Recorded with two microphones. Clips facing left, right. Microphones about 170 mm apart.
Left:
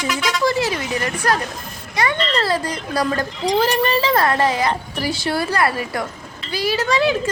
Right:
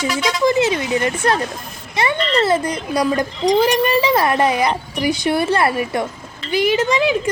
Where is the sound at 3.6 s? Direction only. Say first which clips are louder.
Right 1 dB; 10° right (ahead or behind).